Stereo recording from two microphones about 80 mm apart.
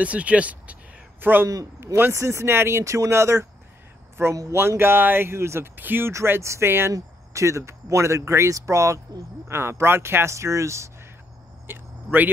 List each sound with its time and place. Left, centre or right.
0.0 s speech: centre
1.5 s a man's voice: right
4.6 s speech: right
11.6 s a sound: right